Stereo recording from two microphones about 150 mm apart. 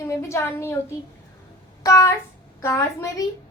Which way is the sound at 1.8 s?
20° left (ahead or behind).